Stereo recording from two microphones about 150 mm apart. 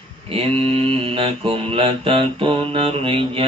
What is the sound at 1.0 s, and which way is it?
Mantra, 35° right (ahead or behind).